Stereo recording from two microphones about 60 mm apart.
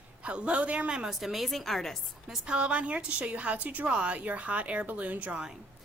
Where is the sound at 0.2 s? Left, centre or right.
Centre.